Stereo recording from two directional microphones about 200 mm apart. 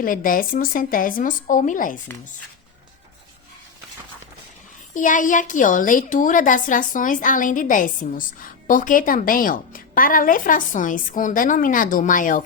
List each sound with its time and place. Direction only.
0.0 s a woman's voice: 45° left (ahead or behind)
4.9 s a woman's voice: 40° left (ahead or behind)